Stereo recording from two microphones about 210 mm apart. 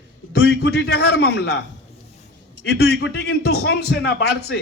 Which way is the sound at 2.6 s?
55° left (ahead or behind).